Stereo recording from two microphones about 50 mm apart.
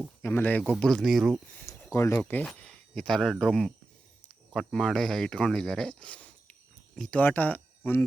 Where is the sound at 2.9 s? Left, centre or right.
Centre.